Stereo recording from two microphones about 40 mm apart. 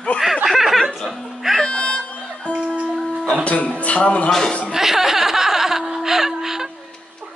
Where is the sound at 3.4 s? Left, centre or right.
Left.